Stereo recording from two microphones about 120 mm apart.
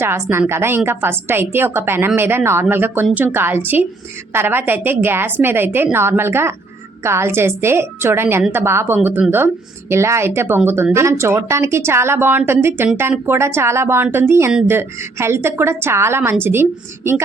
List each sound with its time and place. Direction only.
0.0 s a woman's voice: 20° right (ahead or behind)